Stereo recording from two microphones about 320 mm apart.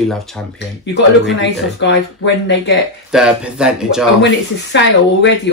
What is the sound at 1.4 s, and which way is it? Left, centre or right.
Speech, left.